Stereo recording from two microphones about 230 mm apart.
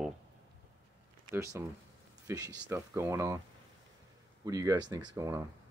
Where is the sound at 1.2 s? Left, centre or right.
Centre.